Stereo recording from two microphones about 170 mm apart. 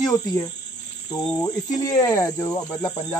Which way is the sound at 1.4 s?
20° left (ahead or behind).